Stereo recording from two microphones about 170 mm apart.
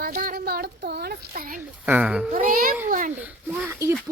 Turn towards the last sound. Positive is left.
turn(degrees=-10)  # may be behind; listen again after turning